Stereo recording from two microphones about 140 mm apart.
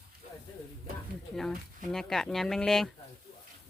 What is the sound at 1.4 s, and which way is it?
Speech, 5° left (ahead or behind).